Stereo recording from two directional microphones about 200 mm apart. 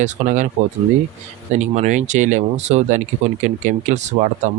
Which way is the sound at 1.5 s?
35° right (ahead or behind).